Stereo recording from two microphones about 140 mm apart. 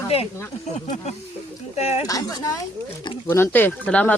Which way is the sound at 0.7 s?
55° left (ahead or behind).